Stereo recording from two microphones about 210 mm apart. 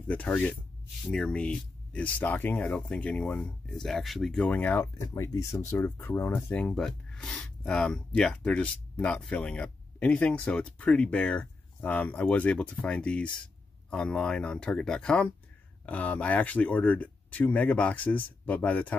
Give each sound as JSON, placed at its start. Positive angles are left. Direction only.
{"t": 0.1, "sound": "speech", "side_deg": 5}